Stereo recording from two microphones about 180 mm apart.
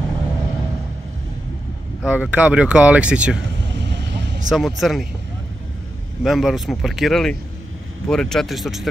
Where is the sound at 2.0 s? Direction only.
5° right (ahead or behind).